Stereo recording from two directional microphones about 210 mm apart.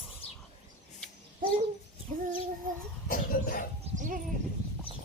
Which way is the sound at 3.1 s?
40° left (ahead or behind).